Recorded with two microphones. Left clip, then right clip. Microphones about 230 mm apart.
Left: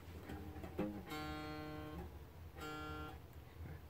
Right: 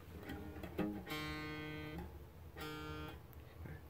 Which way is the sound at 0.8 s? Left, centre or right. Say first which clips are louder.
Right 2 dB; right.